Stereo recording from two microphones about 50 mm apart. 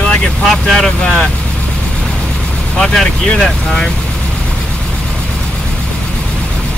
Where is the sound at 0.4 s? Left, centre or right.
Centre.